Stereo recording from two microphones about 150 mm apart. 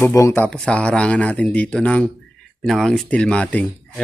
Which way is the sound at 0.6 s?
10° left (ahead or behind).